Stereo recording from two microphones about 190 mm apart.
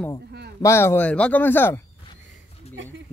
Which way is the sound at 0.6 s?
15° left (ahead or behind).